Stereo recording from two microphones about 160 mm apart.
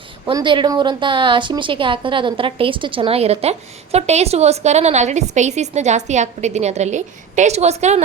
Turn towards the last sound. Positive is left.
turn(degrees=-45)  # may be behind; listen again after turning